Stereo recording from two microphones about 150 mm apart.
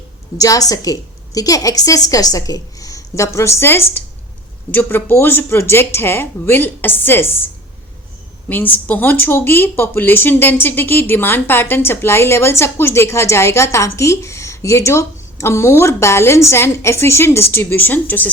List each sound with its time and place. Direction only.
0.3 s a woman's voice: 25° left (ahead or behind)
8.4 s speech: 10° left (ahead or behind)